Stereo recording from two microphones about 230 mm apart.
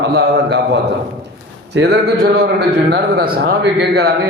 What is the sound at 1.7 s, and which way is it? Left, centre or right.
A man's voice, right.